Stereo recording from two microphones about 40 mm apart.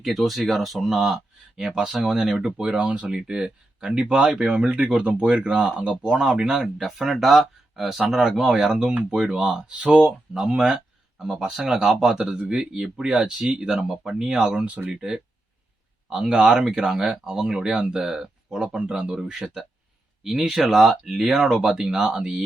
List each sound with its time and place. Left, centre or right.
0.0 s speech: centre
2.6 s speech: right
6.7 s speech: centre
8.2 s speech: centre
10.3 s speech: centre
16.3 s speech: right
16.6 s speech: centre